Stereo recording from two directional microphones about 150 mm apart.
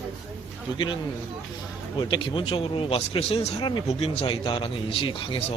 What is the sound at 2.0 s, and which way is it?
Speech, 30° left (ahead or behind).